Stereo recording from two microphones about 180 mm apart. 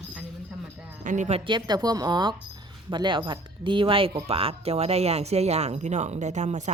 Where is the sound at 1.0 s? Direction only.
40° right (ahead or behind).